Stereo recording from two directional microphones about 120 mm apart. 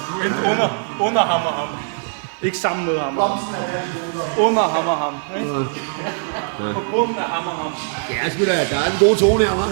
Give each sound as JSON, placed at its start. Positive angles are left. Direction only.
{"t": 0.2, "sound": "speech", "side_deg": -20}
{"t": 2.6, "sound": "speech", "side_deg": -25}
{"t": 4.4, "sound": "speech", "side_deg": -25}
{"t": 6.9, "sound": "speech", "side_deg": -25}